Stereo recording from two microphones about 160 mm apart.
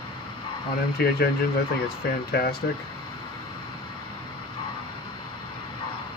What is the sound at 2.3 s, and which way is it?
Speech, 75° left (ahead or behind).